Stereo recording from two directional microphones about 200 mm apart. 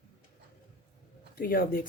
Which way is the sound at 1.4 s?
45° left (ahead or behind).